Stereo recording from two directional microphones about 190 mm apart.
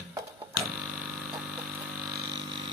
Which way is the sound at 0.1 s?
15° right (ahead or behind).